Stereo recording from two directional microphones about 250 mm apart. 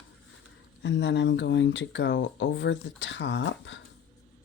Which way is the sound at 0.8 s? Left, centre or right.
Left.